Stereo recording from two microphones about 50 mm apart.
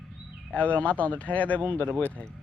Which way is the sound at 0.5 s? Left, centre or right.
Left.